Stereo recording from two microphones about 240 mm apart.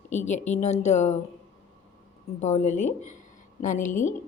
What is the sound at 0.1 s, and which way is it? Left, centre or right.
A woman's voice, left.